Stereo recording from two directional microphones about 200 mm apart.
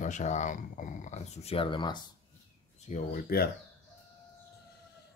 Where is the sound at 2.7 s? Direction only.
40° left (ahead or behind).